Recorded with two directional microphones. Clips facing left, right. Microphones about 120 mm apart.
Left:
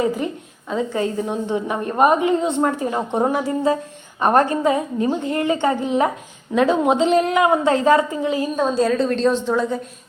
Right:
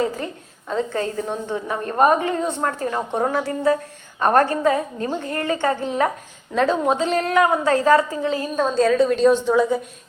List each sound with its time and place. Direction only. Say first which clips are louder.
0.0 s a sound: left 3 dB; 15° left (ahead or behind)
0.7 s a woman's voice: left 1 dB; 5° left (ahead or behind)
1.2 s a woman's voice: left 3 dB; 15° left (ahead or behind); by 9.8 s 5° right (ahead or behind)